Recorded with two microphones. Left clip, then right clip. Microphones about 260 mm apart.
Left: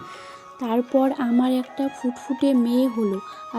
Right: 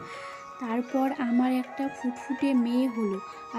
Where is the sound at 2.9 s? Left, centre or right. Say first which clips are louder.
Left 6 dB; centre.